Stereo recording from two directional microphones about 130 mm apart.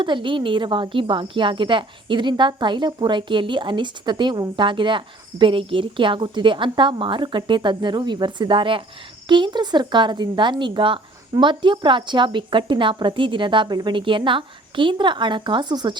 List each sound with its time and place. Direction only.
0.0 s speech: 40° right (ahead or behind)